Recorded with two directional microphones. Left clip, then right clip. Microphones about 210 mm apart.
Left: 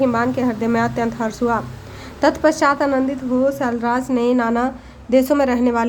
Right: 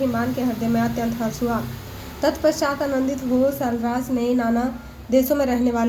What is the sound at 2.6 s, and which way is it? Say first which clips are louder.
A woman's voice: left 5 dB; 15° left (ahead or behind).